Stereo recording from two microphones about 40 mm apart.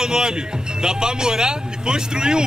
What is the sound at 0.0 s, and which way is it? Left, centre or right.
Speech, centre.